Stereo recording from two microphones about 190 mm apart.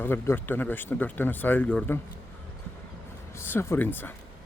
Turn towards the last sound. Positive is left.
turn(degrees=10)  # may be behind; listen again after turning